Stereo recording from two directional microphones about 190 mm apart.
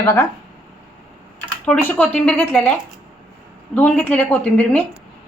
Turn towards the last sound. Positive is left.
turn(degrees=10)  # may be behind; listen again after turning